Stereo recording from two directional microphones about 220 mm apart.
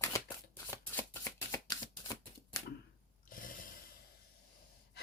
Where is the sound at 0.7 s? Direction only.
10° left (ahead or behind).